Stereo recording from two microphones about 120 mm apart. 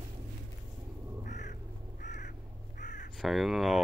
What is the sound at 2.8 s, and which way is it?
Crow, 90° left.